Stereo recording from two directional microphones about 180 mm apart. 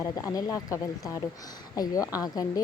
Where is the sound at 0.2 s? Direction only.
20° left (ahead or behind).